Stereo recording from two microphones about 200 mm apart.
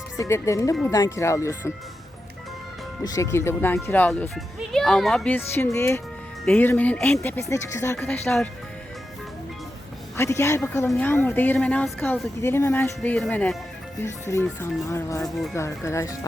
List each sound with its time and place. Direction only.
0.2 s a woman's voice: 15° left (ahead or behind)
3.0 s a woman's voice: 20° left (ahead or behind)
10.2 s a woman's voice: 15° left (ahead or behind)